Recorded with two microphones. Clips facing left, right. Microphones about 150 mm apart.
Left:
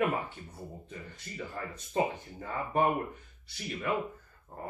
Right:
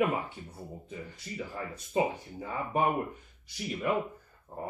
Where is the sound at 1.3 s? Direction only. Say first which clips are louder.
Right 1 dB; 5° right (ahead or behind).